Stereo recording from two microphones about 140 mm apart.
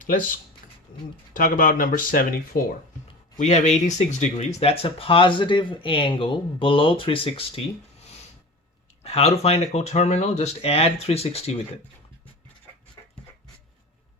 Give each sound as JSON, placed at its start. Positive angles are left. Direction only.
{"t": 0.0, "sound": "speech", "side_deg": 70}
{"t": 3.3, "sound": "speech", "side_deg": 55}
{"t": 4.6, "sound": "speech", "side_deg": 45}
{"t": 9.0, "sound": "speech", "side_deg": 50}